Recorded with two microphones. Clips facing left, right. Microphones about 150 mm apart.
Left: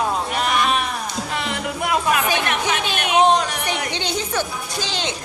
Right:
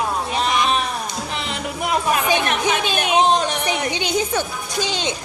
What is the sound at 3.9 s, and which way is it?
A woman's voice, 15° right (ahead or behind).